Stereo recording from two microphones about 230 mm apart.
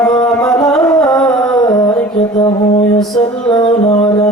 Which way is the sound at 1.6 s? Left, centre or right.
Centre.